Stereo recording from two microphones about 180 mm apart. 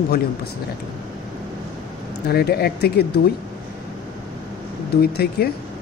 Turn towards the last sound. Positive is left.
turn(degrees=60)  # may be behind; listen again after turning